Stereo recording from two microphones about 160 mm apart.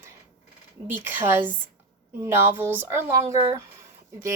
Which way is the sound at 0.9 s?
10° right (ahead or behind).